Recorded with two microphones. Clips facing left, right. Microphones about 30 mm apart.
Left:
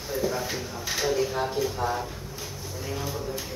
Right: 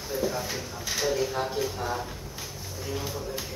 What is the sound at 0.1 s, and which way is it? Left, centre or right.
Speech, centre.